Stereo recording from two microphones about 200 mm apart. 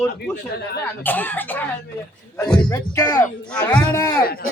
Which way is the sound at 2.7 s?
15° left (ahead or behind).